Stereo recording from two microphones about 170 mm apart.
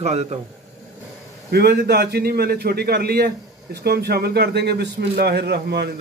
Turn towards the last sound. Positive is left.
turn(degrees=-75)  # may be behind; listen again after turning